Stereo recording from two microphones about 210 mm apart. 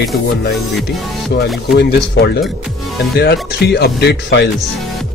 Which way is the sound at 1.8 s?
50° left (ahead or behind).